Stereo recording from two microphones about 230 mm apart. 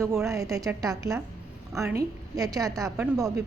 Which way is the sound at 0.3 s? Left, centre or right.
Centre.